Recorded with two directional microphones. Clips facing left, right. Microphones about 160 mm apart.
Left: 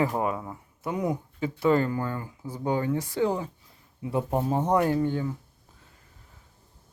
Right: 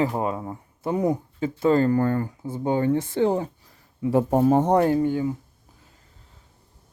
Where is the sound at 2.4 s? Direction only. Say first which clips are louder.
Right 4 dB; 25° right (ahead or behind).